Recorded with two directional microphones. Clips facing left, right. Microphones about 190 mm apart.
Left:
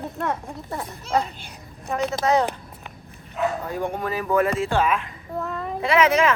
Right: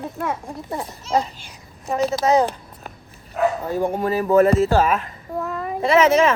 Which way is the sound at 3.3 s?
35° right (ahead or behind).